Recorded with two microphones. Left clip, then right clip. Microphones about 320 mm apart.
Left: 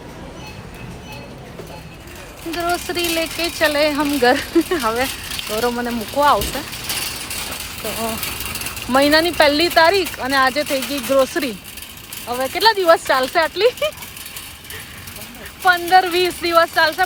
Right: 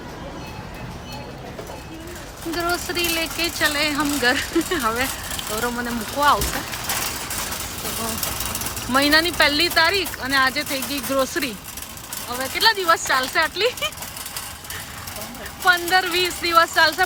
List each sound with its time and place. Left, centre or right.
2.5 s speech: centre
8.9 s speech: centre
15.6 s speech: centre